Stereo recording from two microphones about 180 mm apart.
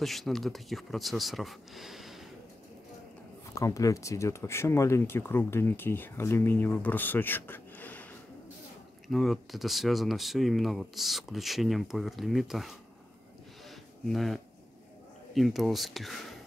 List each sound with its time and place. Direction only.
0.0 s speech: centre (ahead or behind)
3.5 s speech: 20° left (ahead or behind); by 12.7 s centre (ahead or behind)
13.7 s a sound: centre (ahead or behind)
15.3 s speech: centre (ahead or behind)